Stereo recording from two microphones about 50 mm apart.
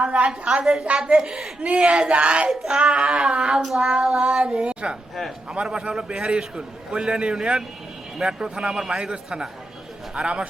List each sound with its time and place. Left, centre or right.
0.0 s a man's voice: right
3.5 s a man's voice: centre
3.8 s a man's voice: centre